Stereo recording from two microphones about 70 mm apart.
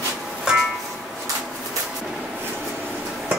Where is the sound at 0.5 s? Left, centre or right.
Centre.